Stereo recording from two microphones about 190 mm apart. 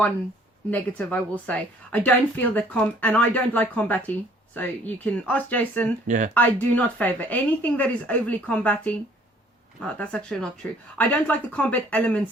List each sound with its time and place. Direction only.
0.7 s speech: 10° left (ahead or behind)
6.1 s speech: 40° right (ahead or behind)
6.3 s speech: 10° left (ahead or behind)